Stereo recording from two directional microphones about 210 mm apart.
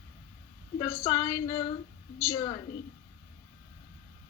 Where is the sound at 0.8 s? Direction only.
15° left (ahead or behind).